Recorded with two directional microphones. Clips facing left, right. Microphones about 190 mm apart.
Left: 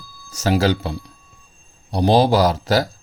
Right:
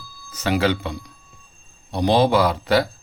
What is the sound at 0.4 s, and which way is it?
Speech, 40° left (ahead or behind).